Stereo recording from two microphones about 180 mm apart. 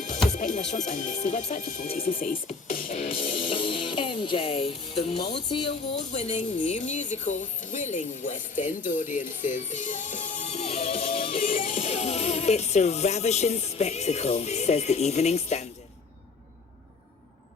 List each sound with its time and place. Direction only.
0.3 s speech: 45° left (ahead or behind)
2.9 s speech: 35° left (ahead or behind)
5.6 s speech: 40° left (ahead or behind)